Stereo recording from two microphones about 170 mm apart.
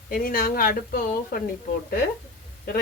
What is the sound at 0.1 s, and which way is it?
Speech, 60° left (ahead or behind).